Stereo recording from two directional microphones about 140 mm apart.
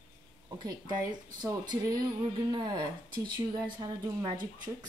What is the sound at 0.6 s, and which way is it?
Speech, 30° right (ahead or behind).